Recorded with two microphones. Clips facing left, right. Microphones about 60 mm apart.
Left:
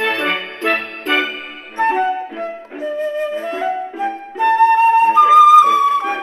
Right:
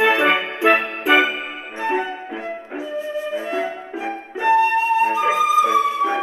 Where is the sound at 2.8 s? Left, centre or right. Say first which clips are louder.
Left 7 dB; left.